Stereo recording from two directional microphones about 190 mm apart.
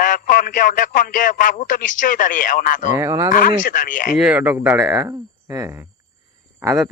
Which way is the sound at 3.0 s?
15° right (ahead or behind).